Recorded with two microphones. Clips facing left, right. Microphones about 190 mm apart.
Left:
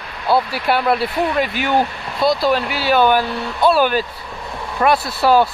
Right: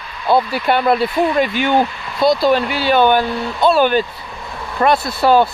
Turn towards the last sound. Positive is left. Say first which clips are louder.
# right 1 dB
turn(degrees=5)  # may be behind; listen again after turning